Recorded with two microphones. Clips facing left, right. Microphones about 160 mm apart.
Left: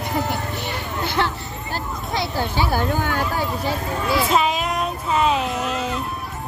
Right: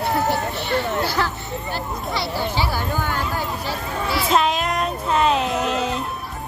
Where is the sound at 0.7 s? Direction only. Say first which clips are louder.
Right 5 dB; 25° left (ahead or behind).